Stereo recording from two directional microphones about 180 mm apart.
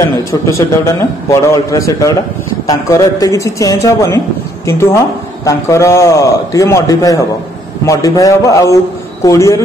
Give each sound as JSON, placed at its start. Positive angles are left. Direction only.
{"t": 0.3, "sound": "speech", "side_deg": 15}